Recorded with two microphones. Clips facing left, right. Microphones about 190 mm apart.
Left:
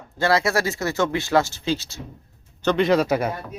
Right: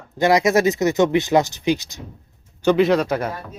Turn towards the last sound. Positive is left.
turn(degrees=10)  # may be behind; listen again after turning